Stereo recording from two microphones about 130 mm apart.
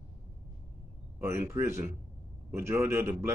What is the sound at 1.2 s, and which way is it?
Speech, 25° right (ahead or behind).